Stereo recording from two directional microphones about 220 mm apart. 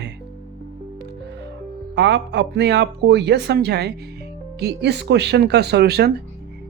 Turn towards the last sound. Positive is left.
turn(degrees=-45)  # may be behind; listen again after turning